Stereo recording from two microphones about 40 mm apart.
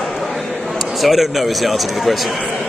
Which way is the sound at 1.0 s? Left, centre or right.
Centre.